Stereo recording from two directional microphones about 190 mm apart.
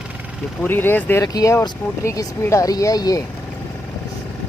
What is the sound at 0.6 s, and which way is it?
Speech, 10° left (ahead or behind).